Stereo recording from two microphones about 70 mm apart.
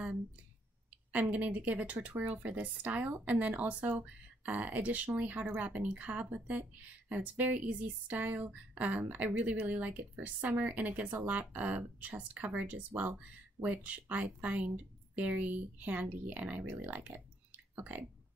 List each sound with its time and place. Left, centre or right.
1.3 s speech: right